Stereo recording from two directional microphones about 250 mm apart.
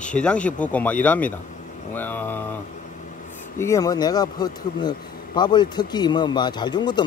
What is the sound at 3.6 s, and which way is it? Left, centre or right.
Speech, centre.